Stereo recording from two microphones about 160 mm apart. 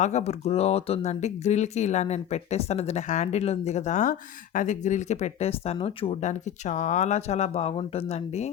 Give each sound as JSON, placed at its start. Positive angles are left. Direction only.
{"t": 0.0, "sound": "speech", "side_deg": 45}